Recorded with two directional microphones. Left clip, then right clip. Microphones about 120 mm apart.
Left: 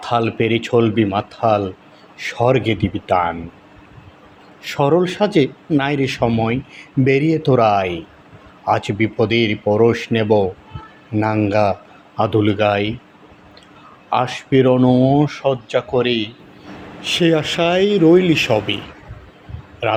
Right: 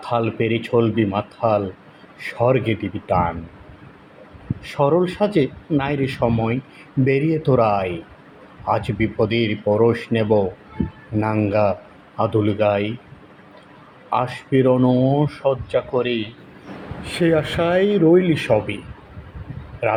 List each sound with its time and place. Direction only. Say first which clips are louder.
0.0 s speech: left 3 dB; 65° left (ahead or behind)
4.6 s speech: left 2 dB; 70° left (ahead or behind)
6.3 s a man's voice: left 3 dB; 60° left (ahead or behind)
14.1 s speech: left 3 dB; 75° left (ahead or behind)
17.0 s speech: left 3 dB; 85° left